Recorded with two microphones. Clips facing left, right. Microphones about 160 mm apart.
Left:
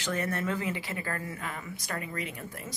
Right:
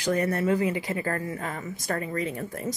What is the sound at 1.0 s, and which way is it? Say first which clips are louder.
Speech: right 6 dB; 40° right (ahead or behind).